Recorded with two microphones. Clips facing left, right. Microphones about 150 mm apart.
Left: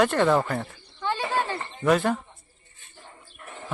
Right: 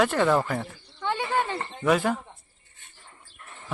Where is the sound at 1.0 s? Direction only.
15° right (ahead or behind).